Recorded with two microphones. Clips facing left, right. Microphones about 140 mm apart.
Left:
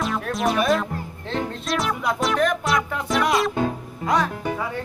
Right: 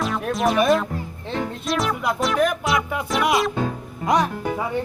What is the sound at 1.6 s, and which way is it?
Music, centre (ahead or behind).